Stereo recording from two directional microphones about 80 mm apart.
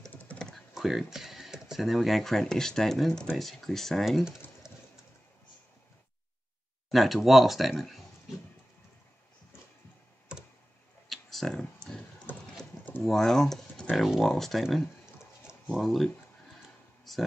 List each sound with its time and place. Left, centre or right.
0.1 s typing: left
0.4 s typing: centre
0.7 s speech: centre
4.6 s pigeon: centre
6.9 s speech: centre
11.1 s clicking: centre
12.3 s clip-clop: left
13.0 s speech: centre
15.5 s a sound: centre
15.8 s speech: centre
17.1 s a sound: centre